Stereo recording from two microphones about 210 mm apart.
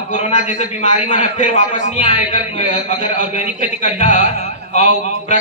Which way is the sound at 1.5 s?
30° left (ahead or behind).